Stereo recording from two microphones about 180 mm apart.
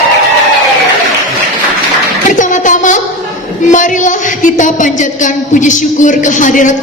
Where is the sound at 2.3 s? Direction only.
45° left (ahead or behind).